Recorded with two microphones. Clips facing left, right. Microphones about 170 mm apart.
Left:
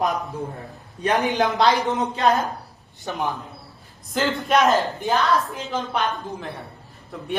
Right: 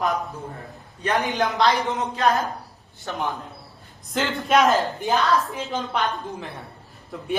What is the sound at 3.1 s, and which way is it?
Speech, 15° left (ahead or behind).